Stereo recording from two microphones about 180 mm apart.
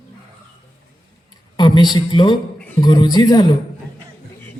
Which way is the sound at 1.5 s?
25° left (ahead or behind).